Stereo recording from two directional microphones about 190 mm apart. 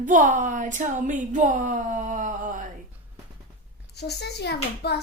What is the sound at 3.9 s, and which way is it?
A child's voice, 60° left (ahead or behind).